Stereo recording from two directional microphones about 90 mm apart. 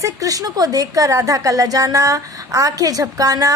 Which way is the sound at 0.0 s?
40° right (ahead or behind).